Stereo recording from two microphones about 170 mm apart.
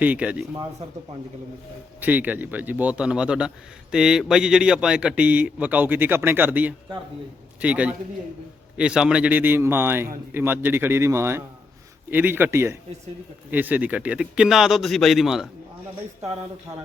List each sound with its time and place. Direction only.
0.0 s a man's voice: 10° right (ahead or behind)
2.0 s a man's voice: 10° right (ahead or behind)